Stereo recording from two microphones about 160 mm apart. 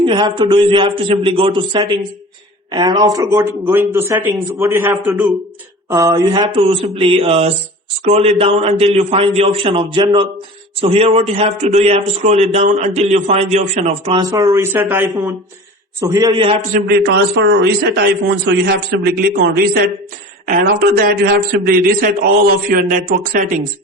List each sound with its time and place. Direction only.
0.0 s a man's voice: 30° right (ahead or behind)
14.2 s a man's voice: 20° right (ahead or behind)
16.7 s a man's voice: 85° right; by 23.6 s 55° right (ahead or behind)